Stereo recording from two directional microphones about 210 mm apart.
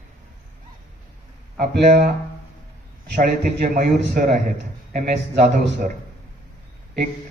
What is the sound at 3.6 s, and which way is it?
A man's voice, 40° right (ahead or behind).